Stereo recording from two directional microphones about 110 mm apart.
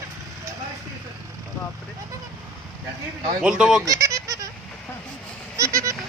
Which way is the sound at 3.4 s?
5° right (ahead or behind).